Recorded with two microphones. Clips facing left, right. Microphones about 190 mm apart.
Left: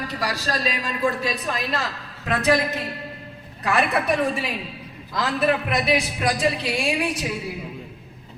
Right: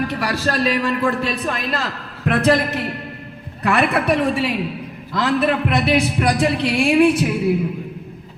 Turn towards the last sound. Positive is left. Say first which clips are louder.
# right 10 dB
turn(degrees=-60)  # may be behind; listen again after turning